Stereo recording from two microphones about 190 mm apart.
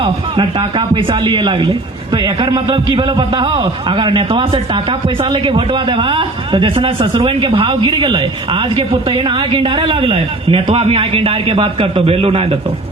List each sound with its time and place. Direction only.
0.0 s a man's voice: 25° right (ahead or behind)